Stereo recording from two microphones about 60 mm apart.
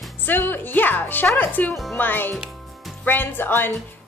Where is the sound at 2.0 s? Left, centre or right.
Left.